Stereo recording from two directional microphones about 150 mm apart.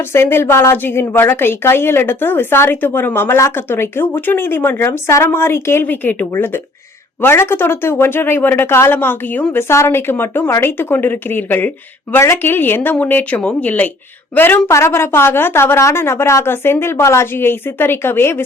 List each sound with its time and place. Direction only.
0.1 s a woman's voice: 15° left (ahead or behind)